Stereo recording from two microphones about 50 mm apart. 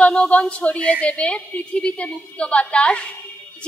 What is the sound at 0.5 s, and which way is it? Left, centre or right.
A woman's voice, left.